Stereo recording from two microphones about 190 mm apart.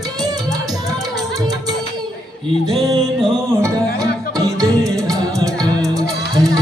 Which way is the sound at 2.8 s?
20° right (ahead or behind).